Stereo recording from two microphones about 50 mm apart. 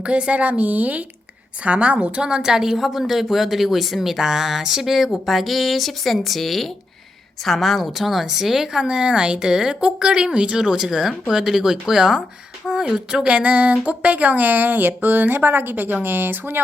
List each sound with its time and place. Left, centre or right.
0.0 s a woman's voice: right
16.0 s speech: right